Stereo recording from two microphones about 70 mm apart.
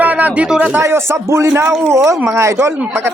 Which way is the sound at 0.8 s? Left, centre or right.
Right.